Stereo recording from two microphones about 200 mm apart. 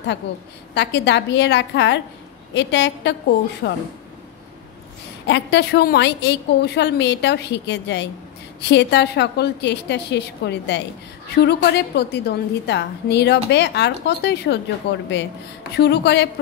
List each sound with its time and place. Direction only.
0.7 s a woman's voice: 60° left (ahead or behind)
5.2 s a woman's voice: 60° left (ahead or behind)